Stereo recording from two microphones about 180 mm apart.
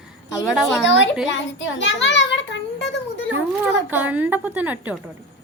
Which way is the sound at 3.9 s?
10° right (ahead or behind).